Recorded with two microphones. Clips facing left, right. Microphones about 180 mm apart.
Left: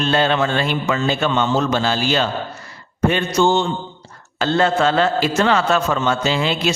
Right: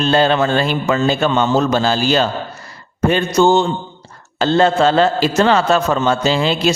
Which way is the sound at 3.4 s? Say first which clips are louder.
Right 4 dB; 40° right (ahead or behind).